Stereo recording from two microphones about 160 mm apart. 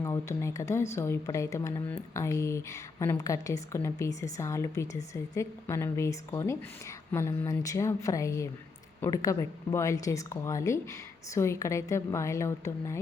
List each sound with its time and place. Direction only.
0.0 s a woman's voice: 20° left (ahead or behind)